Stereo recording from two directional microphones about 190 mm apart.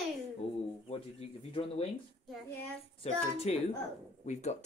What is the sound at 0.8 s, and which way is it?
Speech, 30° left (ahead or behind).